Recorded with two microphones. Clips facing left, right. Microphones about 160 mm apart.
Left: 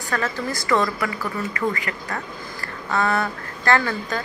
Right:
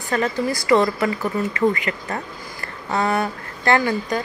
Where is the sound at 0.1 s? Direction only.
20° right (ahead or behind).